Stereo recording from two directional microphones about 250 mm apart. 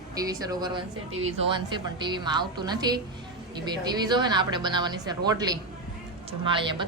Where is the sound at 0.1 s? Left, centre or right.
Centre.